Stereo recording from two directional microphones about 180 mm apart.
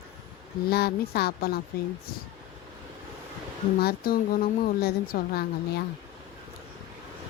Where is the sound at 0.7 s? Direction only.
60° left (ahead or behind).